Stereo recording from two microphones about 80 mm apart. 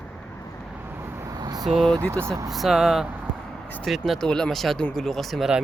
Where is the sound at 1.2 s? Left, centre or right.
Right.